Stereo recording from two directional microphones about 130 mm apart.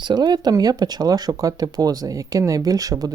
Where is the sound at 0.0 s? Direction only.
35° right (ahead or behind).